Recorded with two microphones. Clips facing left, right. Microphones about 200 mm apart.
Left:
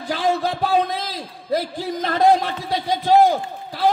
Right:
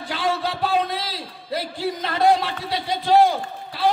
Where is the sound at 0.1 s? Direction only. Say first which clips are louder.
Left 4 dB; 45° left (ahead or behind).